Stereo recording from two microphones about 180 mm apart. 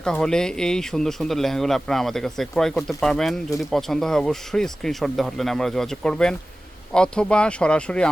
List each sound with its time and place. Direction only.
0.0 s speech: 5° left (ahead or behind)